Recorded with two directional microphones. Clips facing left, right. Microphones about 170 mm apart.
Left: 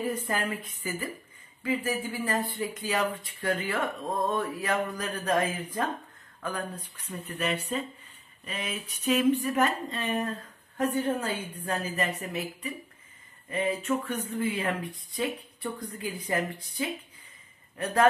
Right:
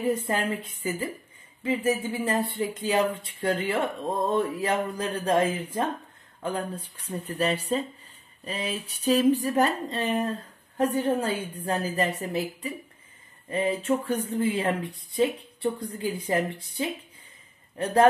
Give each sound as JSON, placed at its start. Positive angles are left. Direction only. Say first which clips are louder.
{"t": 0.0, "sound": "speech", "louder": "right 4 dB", "side_deg": -25}